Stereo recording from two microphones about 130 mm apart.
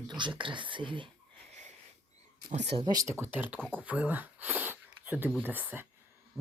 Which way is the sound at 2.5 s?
55° right (ahead or behind).